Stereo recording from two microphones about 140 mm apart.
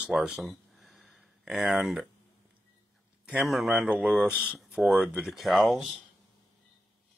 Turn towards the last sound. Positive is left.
turn(degrees=0)  # may be behind; listen again after turning